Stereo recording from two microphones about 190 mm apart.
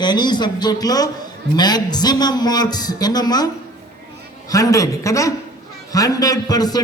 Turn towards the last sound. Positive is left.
turn(degrees=20)  # may be behind; listen again after turning